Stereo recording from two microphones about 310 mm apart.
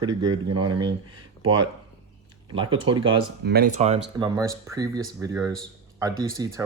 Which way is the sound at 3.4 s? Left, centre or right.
Right.